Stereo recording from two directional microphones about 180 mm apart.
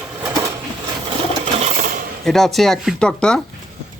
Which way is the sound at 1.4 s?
35° right (ahead or behind).